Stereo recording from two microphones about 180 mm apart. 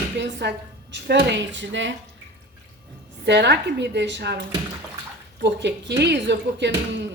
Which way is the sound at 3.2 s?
70° right (ahead or behind).